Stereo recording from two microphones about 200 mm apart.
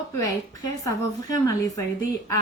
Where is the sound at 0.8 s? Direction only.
15° left (ahead or behind).